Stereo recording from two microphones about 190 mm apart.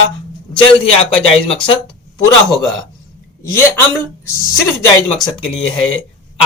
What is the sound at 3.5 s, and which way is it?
Speech, 15° left (ahead or behind).